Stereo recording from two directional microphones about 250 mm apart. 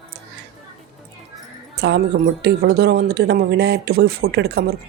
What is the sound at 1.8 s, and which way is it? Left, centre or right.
A woman's voice, right.